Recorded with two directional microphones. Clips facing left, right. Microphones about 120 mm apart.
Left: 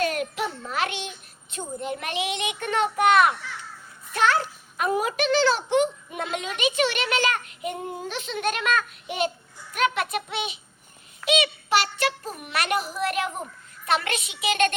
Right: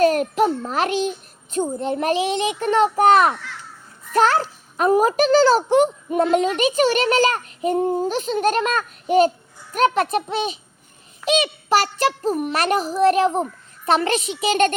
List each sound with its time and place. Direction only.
0.0 s a child's voice: 40° right (ahead or behind)